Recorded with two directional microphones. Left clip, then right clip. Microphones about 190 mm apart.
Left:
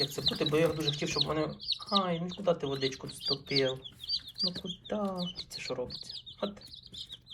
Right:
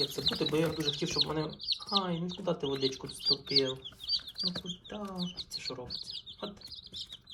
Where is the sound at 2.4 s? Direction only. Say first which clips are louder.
Left 5 dB; 15° right (ahead or behind).